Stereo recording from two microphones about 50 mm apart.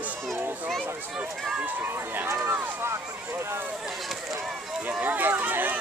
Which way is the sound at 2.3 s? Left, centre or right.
Right.